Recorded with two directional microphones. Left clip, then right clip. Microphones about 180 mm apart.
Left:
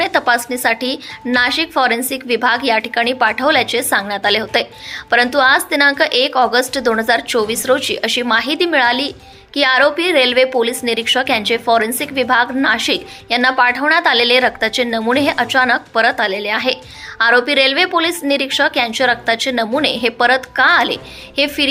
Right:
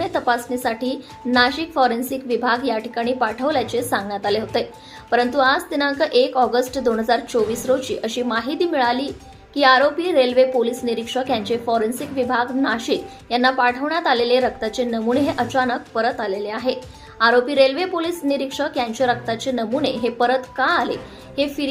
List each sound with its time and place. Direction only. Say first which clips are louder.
0.0 s a woman's voice: left 6 dB; 20° left (ahead or behind)